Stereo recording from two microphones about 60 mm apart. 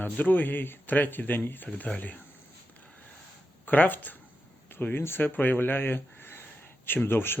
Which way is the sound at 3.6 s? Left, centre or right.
Left.